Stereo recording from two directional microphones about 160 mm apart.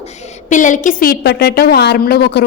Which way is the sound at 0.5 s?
50° left (ahead or behind).